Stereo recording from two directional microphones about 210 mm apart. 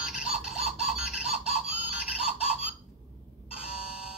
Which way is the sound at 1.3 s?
5° right (ahead or behind).